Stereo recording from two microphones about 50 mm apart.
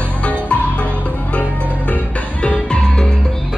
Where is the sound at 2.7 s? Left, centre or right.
Centre.